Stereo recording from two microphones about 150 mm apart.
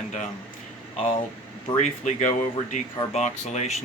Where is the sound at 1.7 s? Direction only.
55° left (ahead or behind).